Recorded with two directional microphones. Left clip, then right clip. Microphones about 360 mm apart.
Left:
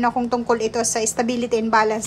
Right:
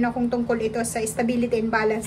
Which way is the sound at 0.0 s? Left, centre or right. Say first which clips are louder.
Left 4 dB; centre.